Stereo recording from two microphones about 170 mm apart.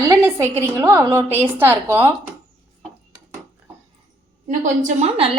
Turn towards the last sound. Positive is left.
turn(degrees=-45)  # may be behind; listen again after turning